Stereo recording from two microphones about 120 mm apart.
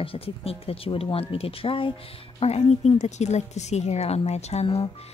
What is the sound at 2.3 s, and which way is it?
Speech, 60° left (ahead or behind).